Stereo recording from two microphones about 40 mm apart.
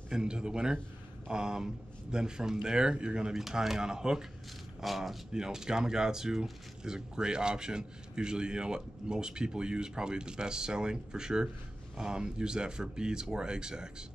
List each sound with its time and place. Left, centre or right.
0.1 s speech: centre
3.3 s speech: centre
4.8 s speech: centre
5.3 s speech: centre